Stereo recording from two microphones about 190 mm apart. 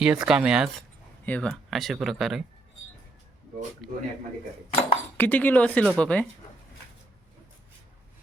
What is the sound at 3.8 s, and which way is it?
Speech, centre (ahead or behind).